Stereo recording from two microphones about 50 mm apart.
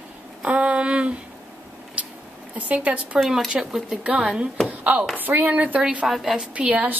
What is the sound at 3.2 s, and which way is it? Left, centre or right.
Speech, centre.